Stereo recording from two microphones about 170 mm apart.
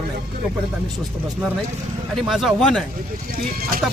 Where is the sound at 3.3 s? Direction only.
60° right (ahead or behind).